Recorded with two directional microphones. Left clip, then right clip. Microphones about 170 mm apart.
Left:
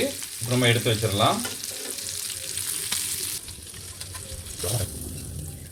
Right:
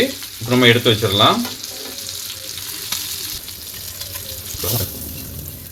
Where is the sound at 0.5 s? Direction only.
70° right (ahead or behind).